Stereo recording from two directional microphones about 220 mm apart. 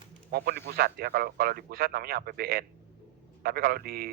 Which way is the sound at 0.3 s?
45° right (ahead or behind).